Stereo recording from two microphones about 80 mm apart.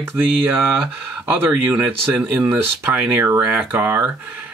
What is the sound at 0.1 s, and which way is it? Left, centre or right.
Speech, right.